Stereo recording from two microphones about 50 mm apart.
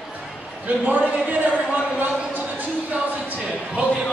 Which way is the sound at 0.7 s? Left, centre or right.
Right.